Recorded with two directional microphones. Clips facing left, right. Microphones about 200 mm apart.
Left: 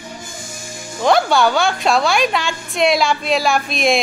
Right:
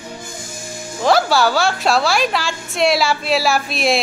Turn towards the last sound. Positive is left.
turn(degrees=-5)  # may be behind; listen again after turning